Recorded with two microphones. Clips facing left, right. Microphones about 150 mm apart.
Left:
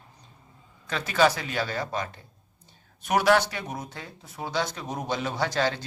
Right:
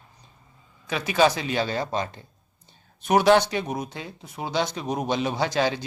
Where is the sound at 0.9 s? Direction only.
15° right (ahead or behind).